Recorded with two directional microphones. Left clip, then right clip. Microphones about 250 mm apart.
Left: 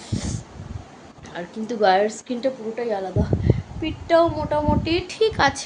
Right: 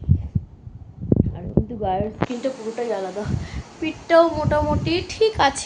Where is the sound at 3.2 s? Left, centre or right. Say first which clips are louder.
Left 6 dB; centre.